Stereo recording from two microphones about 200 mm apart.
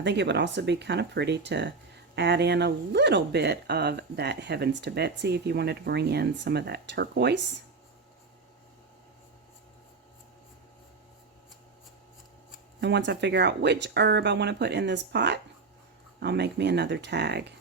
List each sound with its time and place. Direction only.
0.0 s speech: 60° right (ahead or behind)
12.8 s speech: 60° right (ahead or behind)